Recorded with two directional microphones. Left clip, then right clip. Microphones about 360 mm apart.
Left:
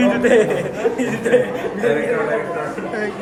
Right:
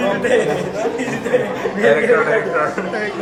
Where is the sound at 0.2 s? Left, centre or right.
Left.